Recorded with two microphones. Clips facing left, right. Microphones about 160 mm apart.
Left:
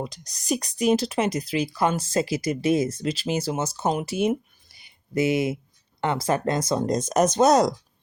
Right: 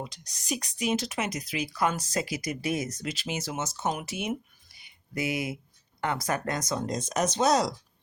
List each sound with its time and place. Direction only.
0.0 s speech: 40° left (ahead or behind)
4.8 s a sound: 25° left (ahead or behind)
6.0 s speech: 25° left (ahead or behind); by 7.7 s 45° left (ahead or behind)